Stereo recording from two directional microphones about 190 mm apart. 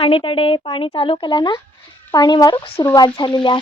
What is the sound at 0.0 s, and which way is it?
Speech, 25° left (ahead or behind).